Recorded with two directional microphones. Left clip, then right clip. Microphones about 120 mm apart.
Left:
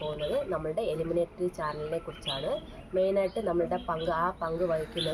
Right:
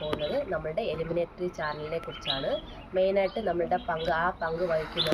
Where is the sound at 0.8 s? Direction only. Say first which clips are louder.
Left 1 dB; 20° left (ahead or behind).